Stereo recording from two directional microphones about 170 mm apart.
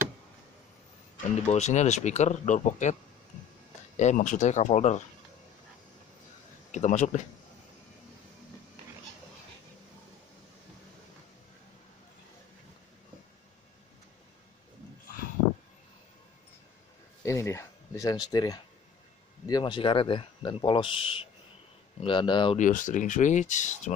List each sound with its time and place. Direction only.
1.4 s speech: 40° left (ahead or behind)
6.7 s speech: 45° left (ahead or behind)
17.2 s speech: 15° left (ahead or behind)
22.6 s speech: 50° left (ahead or behind)